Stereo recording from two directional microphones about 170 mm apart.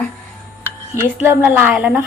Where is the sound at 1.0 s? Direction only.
10° right (ahead or behind).